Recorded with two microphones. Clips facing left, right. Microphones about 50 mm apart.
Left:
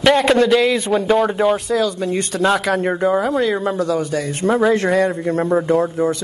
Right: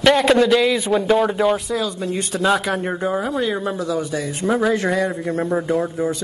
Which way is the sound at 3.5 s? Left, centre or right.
Left.